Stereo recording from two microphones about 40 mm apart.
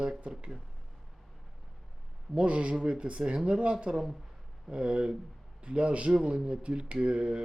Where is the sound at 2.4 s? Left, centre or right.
Right.